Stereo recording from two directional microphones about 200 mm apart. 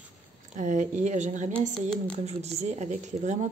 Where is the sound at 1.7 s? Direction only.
5° left (ahead or behind).